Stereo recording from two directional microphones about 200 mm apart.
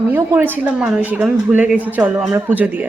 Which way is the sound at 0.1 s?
10° right (ahead or behind).